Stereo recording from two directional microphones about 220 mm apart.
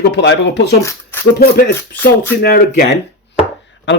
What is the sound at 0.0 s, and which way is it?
Speech, 50° left (ahead or behind).